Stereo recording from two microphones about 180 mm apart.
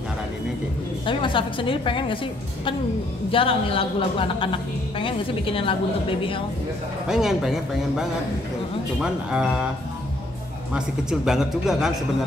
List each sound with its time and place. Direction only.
1.0 s a woman's voice: 30° left (ahead or behind)
3.3 s a woman's voice: 30° left (ahead or behind)
7.1 s speech: 5° right (ahead or behind)
9.0 s speech: 5° right (ahead or behind)
10.7 s speech: 5° right (ahead or behind)